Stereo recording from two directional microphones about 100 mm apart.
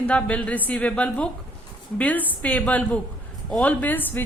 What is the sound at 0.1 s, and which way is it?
A woman's voice, 15° left (ahead or behind).